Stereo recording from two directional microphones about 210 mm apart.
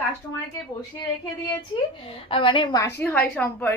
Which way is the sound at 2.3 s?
25° left (ahead or behind).